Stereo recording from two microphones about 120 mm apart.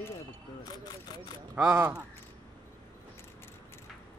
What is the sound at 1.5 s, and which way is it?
Speech, 15° right (ahead or behind).